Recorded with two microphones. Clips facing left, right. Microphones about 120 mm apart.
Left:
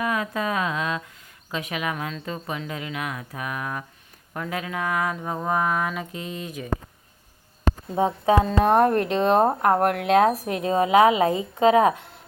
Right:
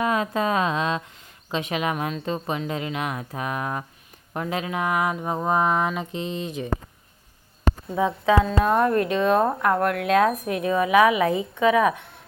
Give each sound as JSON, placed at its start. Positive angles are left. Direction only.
{"t": 0.0, "sound": "speech", "side_deg": -25}
{"t": 7.9, "sound": "speech", "side_deg": 35}